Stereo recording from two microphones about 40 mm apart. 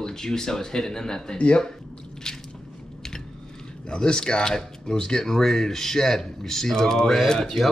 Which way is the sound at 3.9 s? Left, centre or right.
Centre.